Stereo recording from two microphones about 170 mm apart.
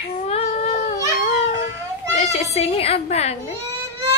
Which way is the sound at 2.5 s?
35° left (ahead or behind).